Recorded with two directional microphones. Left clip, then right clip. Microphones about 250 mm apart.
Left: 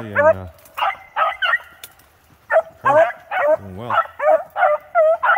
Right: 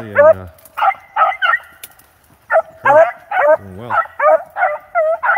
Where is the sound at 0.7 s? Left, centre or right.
Centre.